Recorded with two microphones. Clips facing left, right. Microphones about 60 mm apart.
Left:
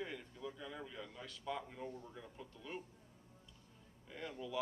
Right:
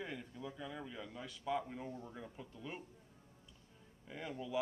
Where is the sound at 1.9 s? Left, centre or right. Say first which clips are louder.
Right 2 dB; right.